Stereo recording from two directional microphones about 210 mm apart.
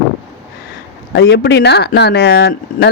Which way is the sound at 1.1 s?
50° left (ahead or behind).